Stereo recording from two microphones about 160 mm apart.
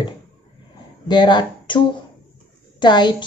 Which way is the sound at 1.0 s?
30° left (ahead or behind).